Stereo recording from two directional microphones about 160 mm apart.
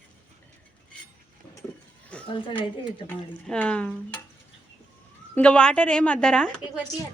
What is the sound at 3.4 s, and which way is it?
Speech, 5° left (ahead or behind).